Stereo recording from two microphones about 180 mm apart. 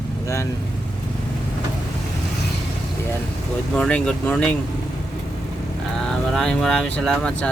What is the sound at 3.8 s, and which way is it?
Speech, 5° left (ahead or behind).